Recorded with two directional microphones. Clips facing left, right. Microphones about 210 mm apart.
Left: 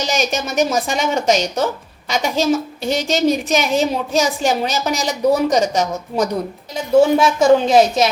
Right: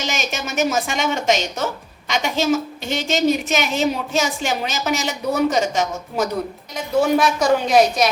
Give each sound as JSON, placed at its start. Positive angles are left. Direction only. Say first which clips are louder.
{"t": 0.0, "sound": "a woman's voice", "louder": "left 5 dB", "side_deg": 35}
{"t": 7.0, "sound": "speech", "louder": "left 2 dB", "side_deg": 25}